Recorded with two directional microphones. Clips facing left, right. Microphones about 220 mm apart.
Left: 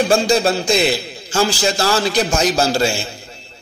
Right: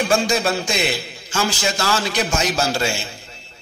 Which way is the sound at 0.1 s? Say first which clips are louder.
Left 4 dB; 35° left (ahead or behind).